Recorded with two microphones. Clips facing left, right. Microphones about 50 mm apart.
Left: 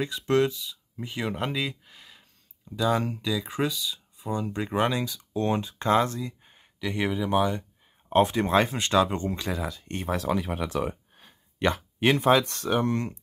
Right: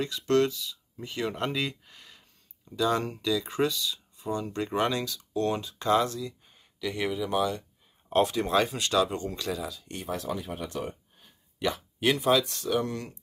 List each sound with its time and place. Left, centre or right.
0.0 s speech: centre; by 10.0 s left
10.0 s speech: left
11.6 s speech: left
12.0 s speech: left
12.4 s speech: left